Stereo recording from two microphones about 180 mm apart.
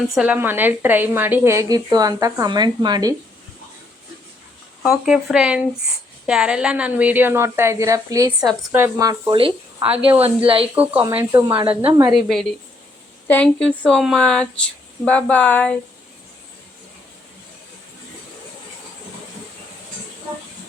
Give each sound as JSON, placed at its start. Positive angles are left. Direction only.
{"t": 0.1, "sound": "a woman's voice", "side_deg": -5}
{"t": 4.8, "sound": "a woman's voice", "side_deg": -5}
{"t": 11.1, "sound": "a woman's voice", "side_deg": -15}
{"t": 12.1, "sound": "speech", "side_deg": 0}